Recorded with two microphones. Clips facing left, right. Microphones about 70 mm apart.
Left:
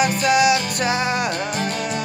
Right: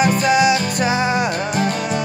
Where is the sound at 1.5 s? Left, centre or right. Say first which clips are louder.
Right 4 dB; right.